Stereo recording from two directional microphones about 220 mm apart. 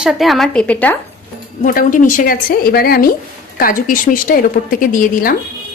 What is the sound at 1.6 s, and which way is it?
A woman's voice, 40° left (ahead or behind).